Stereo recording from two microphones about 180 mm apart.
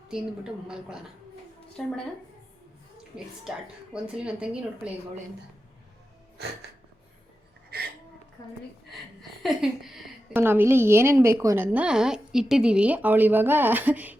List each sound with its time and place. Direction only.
0.1 s speech: 5° right (ahead or behind)
3.9 s speech: 5° right (ahead or behind)
7.7 s a sound: 60° right (ahead or behind)
9.4 s a woman's voice: centre (ahead or behind)